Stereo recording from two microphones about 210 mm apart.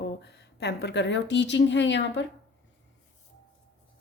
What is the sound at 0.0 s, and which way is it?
A woman's voice, 55° left (ahead or behind).